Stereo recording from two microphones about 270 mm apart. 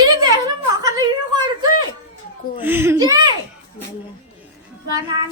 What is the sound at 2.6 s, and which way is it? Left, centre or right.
Speech, centre.